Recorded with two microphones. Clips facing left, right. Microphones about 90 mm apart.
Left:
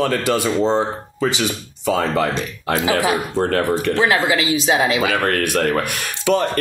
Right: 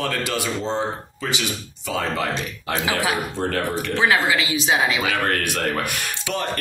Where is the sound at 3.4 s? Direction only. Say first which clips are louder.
Left 6 dB; 45° left (ahead or behind).